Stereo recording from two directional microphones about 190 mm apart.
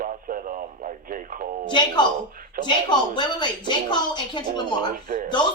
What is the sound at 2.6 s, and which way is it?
Speech, 25° left (ahead or behind).